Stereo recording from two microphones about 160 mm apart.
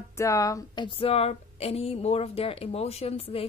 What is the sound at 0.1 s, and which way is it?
A woman's voice, 20° left (ahead or behind).